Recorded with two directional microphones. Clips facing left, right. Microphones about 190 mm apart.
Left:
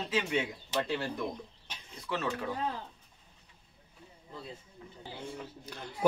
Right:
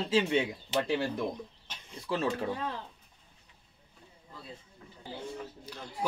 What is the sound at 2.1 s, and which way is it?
Speech, 30° right (ahead or behind).